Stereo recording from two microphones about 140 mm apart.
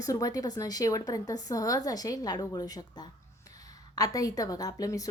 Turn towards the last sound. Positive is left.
turn(degrees=25)  # may be behind; listen again after turning